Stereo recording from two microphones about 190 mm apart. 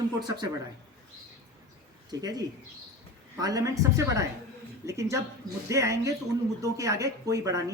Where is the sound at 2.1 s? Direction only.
20° right (ahead or behind).